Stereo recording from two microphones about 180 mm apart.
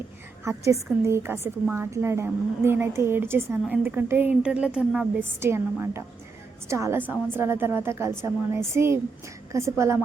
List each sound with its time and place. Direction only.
0.4 s a woman's voice: 15° right (ahead or behind)